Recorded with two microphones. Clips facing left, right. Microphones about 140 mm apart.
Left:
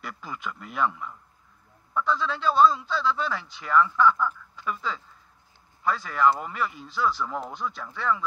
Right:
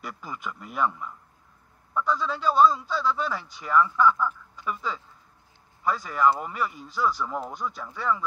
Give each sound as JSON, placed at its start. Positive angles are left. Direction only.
{"t": 0.0, "sound": "a man's voice", "side_deg": -10}
{"t": 2.0, "sound": "a man's voice", "side_deg": -10}